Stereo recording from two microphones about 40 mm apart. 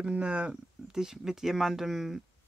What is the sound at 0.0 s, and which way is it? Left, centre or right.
Speech, right.